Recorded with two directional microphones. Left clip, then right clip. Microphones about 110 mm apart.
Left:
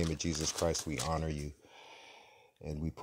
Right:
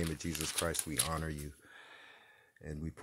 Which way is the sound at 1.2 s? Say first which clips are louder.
Left 3 dB; 15° left (ahead or behind).